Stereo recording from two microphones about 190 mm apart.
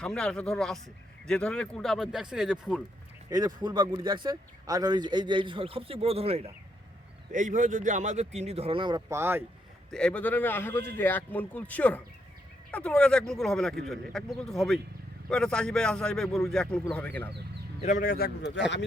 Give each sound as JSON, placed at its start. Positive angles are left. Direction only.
{"t": 0.0, "sound": "speech", "side_deg": 5}
{"t": 3.2, "sound": "speech", "side_deg": -20}
{"t": 7.3, "sound": "speech", "side_deg": -40}
{"t": 9.9, "sound": "speech", "side_deg": 5}
{"t": 17.7, "sound": "a man's voice", "side_deg": 40}